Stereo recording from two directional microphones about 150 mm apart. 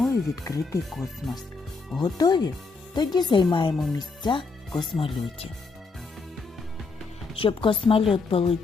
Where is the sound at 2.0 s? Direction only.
25° left (ahead or behind).